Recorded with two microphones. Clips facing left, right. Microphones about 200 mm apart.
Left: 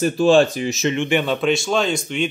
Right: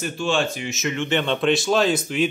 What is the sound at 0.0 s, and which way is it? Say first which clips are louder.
Speech: left 9 dB; 35° left (ahead or behind).